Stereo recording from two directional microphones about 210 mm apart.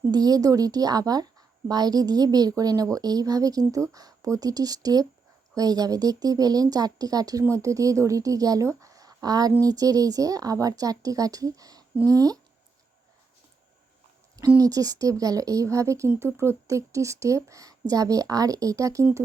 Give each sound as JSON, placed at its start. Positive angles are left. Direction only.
{"t": 0.1, "sound": "speech", "side_deg": -20}
{"t": 14.3, "sound": "speech", "side_deg": -15}